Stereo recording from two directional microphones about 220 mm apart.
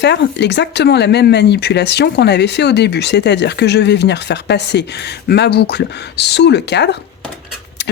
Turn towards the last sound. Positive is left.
turn(degrees=50)  # may be behind; listen again after turning